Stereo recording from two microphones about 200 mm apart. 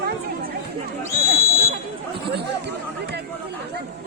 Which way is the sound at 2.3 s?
55° right (ahead or behind).